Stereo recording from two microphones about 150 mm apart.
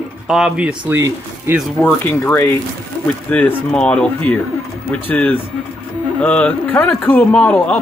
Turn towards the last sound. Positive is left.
turn(degrees=10)  # may be behind; listen again after turning